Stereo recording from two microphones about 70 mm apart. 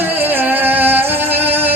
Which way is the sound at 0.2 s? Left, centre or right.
Right.